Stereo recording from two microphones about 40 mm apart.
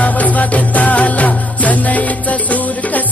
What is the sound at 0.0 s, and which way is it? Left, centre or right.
Music, left.